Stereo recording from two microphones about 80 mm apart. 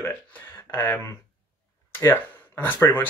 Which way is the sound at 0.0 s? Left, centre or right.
Left.